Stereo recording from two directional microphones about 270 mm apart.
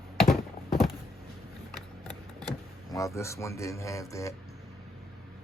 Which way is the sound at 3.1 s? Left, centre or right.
Centre.